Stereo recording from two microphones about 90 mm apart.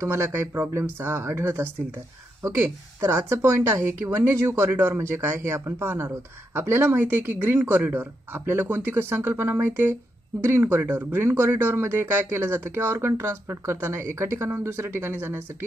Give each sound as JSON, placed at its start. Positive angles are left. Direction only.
{"t": 0.0, "sound": "speech", "side_deg": -30}
{"t": 3.0, "sound": "speech", "side_deg": -25}